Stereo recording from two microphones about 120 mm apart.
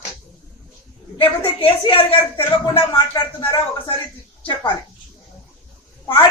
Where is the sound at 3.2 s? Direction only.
30° left (ahead or behind).